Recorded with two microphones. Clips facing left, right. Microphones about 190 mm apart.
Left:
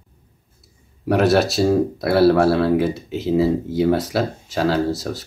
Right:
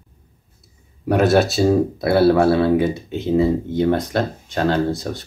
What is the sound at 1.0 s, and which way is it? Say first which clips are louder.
Speech: right 1 dB; centre (ahead or behind).